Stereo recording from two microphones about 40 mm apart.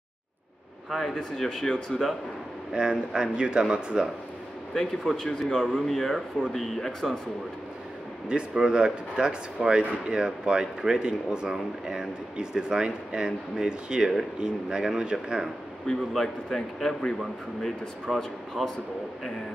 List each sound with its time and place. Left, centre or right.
0.8 s speech: centre
2.7 s speech: right
4.7 s a man's voice: centre
8.3 s speech: right
15.9 s a man's voice: centre
18.0 s speech: centre